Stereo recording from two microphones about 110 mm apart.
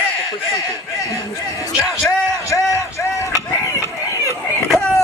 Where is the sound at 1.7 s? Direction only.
5° right (ahead or behind).